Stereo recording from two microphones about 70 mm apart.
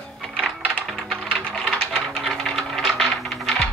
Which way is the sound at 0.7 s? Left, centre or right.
Centre.